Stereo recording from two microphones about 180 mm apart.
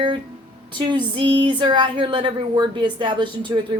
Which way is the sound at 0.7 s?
25° right (ahead or behind).